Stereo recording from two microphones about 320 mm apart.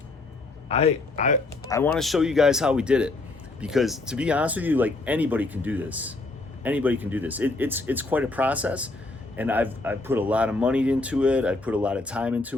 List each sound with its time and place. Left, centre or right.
0.7 s a man's voice: centre
1.7 s speech: centre